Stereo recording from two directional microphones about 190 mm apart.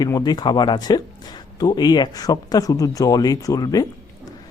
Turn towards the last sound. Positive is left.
turn(degrees=20)  # may be behind; listen again after turning